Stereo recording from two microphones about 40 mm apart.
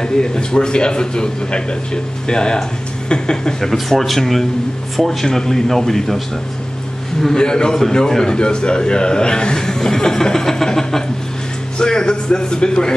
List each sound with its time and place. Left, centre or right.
0.0 s a man's voice: centre
3.6 s a man's voice: centre
11.8 s a sound: left